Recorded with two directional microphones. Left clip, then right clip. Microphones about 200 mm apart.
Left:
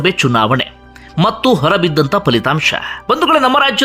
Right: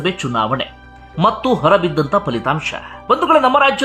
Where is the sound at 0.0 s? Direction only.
25° left (ahead or behind).